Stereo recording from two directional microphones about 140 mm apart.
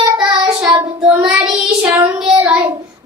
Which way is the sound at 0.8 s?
10° right (ahead or behind).